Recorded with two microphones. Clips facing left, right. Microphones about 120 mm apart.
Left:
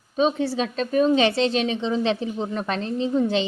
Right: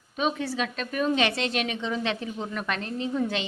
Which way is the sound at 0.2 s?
30° left (ahead or behind).